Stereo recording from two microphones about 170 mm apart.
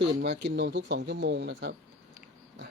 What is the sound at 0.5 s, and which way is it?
Speech, 75° right (ahead or behind).